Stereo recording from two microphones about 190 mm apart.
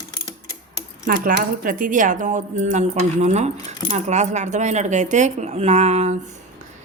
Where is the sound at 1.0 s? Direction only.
45° right (ahead or behind).